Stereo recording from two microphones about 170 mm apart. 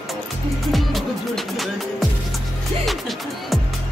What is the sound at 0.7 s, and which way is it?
Music, centre (ahead or behind).